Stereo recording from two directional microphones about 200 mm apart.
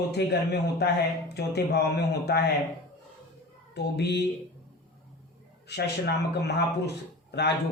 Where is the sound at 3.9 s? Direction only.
55° left (ahead or behind).